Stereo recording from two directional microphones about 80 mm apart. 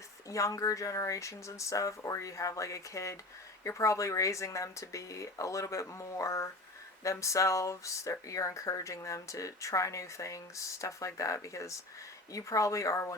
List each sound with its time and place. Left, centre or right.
0.3 s speech: left